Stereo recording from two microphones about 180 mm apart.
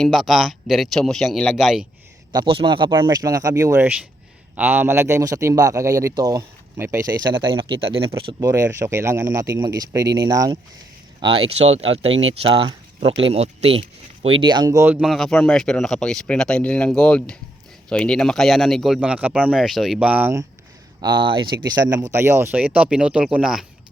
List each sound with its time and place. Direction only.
0.0 s speech: centre (ahead or behind)
2.3 s a man's voice: 30° right (ahead or behind)
7.3 s speech: 25° right (ahead or behind); by 20.4 s 10° right (ahead or behind)
21.0 s a man's voice: 25° right (ahead or behind); by 23.6 s 5° right (ahead or behind)